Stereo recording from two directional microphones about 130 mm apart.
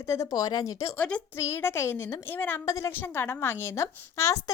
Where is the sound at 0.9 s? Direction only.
10° left (ahead or behind).